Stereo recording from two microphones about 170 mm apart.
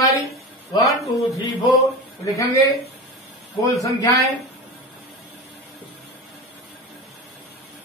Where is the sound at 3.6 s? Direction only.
20° left (ahead or behind).